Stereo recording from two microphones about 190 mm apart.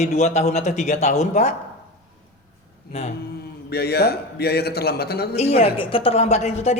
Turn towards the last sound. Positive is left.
turn(degrees=35)  # may be behind; listen again after turning